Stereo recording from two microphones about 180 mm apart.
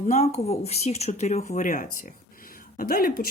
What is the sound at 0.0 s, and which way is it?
Speech, 40° left (ahead or behind).